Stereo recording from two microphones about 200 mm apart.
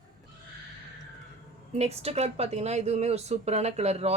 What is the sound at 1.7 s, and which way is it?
Speech, 30° right (ahead or behind).